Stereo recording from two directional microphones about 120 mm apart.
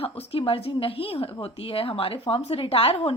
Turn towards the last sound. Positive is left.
turn(degrees=55)  # may be behind; listen again after turning